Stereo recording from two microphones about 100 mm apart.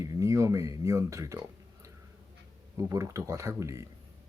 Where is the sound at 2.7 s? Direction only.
30° right (ahead or behind).